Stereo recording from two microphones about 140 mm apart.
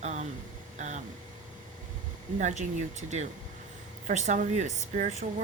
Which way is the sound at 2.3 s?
60° right (ahead or behind).